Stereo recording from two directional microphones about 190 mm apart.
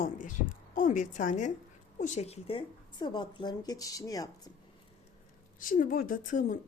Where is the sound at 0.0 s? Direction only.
45° left (ahead or behind); by 4.5 s 20° left (ahead or behind).